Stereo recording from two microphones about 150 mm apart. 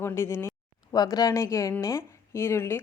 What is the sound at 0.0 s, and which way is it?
Speech, 15° left (ahead or behind).